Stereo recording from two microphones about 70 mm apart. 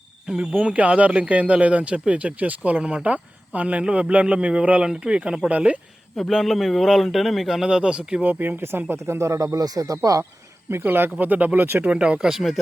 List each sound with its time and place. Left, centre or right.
0.3 s a man's voice: centre
6.1 s a man's voice: centre
8.2 s speech: right
9.6 s speech: right
10.7 s speech: right
11.9 s a man's voice: centre